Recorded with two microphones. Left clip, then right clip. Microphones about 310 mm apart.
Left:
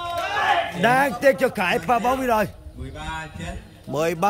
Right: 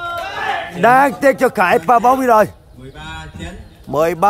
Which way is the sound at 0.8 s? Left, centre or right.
Centre.